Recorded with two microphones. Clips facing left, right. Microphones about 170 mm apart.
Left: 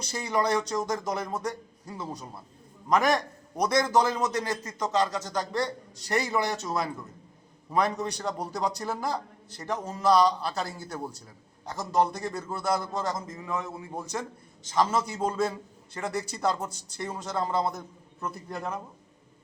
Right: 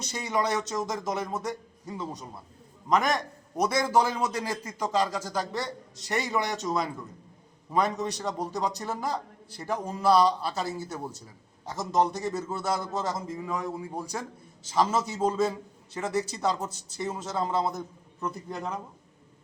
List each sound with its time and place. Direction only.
0.0 s a man's voice: centre (ahead or behind)
7.7 s a man's voice: centre (ahead or behind)